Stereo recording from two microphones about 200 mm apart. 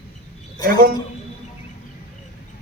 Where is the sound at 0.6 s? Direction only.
20° left (ahead or behind).